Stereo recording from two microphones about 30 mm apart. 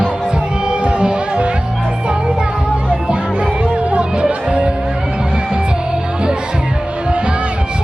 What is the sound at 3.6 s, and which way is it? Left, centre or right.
Music, right.